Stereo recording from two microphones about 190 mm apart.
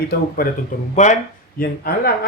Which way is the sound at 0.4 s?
50° left (ahead or behind).